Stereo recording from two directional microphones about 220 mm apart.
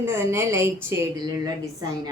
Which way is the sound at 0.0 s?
10° right (ahead or behind).